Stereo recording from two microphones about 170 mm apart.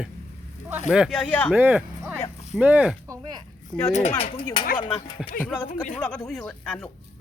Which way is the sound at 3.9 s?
40° left (ahead or behind).